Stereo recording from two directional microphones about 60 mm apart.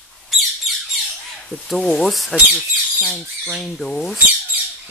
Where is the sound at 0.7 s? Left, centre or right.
Centre.